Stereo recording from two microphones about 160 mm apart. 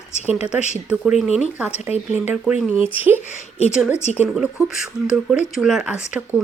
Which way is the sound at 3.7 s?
5° right (ahead or behind).